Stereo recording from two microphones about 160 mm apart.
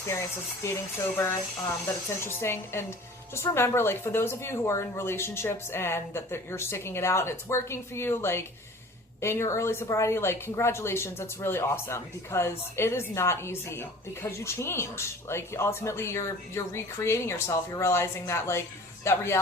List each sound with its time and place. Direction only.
0.1 s speech: 15° left (ahead or behind)